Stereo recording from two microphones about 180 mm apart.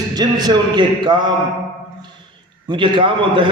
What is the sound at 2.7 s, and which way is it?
Speech, 25° right (ahead or behind).